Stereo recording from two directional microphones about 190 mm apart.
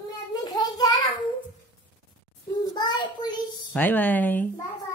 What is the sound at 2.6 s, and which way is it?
Child singing, 20° left (ahead or behind).